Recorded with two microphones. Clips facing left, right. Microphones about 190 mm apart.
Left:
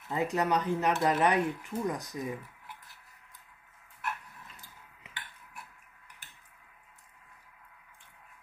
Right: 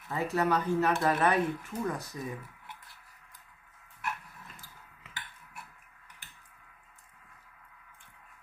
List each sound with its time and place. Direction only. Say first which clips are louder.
0.1 s speech: even; 20° left (ahead or behind)